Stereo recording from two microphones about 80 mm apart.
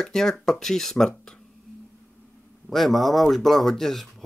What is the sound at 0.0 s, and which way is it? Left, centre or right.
Speech, centre.